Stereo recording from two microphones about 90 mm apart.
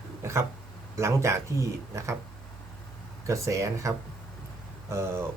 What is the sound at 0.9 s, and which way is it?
Speech, 35° right (ahead or behind).